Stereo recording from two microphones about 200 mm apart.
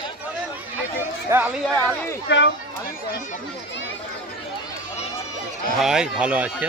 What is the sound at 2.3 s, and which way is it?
Speech, 60° left (ahead or behind).